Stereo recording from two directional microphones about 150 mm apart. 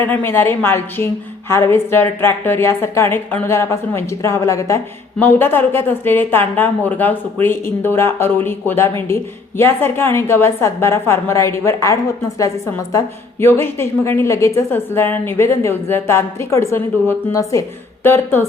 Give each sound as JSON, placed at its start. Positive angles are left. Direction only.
{"t": 0.0, "sound": "a woman's voice", "side_deg": 15}